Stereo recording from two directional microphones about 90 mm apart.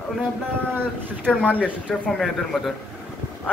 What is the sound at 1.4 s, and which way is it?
Speech, 15° right (ahead or behind).